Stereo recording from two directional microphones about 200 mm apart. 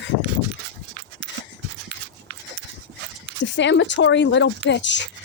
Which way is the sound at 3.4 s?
65° left (ahead or behind).